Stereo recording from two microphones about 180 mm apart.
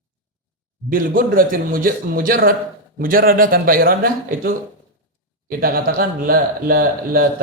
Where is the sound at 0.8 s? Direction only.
50° right (ahead or behind).